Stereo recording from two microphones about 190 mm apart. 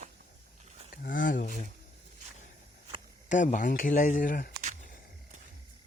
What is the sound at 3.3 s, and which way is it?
Speech, 40° left (ahead or behind).